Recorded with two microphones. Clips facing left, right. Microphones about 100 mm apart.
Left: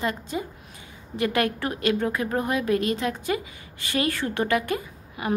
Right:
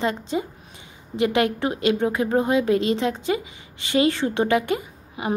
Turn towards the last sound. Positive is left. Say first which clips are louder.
# right 2 dB
turn(degrees=-20)  # may be behind; listen again after turning